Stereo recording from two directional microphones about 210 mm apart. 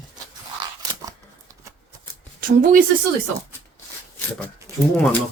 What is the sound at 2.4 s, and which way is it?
Speech, 40° right (ahead or behind).